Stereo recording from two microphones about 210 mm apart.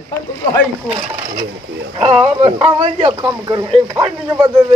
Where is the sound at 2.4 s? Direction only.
25° right (ahead or behind).